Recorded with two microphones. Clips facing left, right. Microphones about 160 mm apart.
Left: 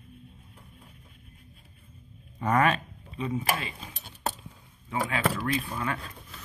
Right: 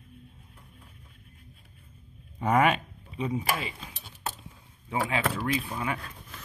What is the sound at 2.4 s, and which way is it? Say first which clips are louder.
Speech: right 1 dB; 15° right (ahead or behind).